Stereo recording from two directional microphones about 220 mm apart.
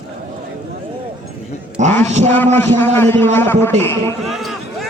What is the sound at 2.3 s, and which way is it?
A man's voice, 10° left (ahead or behind).